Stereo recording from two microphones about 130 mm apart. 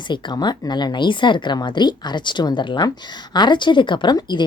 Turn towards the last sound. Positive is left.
turn(degrees=35)  # may be behind; listen again after turning